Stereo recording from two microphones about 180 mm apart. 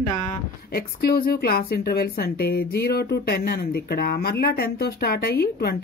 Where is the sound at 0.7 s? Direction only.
60° left (ahead or behind).